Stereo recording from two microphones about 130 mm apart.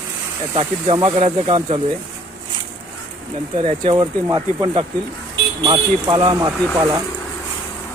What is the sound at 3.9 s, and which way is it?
Speech, 30° right (ahead or behind).